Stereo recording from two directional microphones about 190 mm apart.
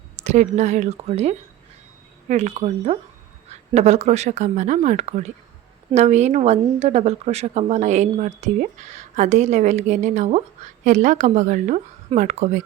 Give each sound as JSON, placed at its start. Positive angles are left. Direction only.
{"t": 0.3, "sound": "a woman's voice", "side_deg": -35}